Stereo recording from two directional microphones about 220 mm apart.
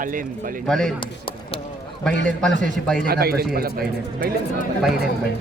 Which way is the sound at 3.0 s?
45° right (ahead or behind).